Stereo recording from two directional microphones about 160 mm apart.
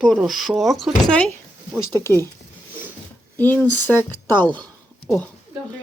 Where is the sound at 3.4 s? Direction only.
10° left (ahead or behind).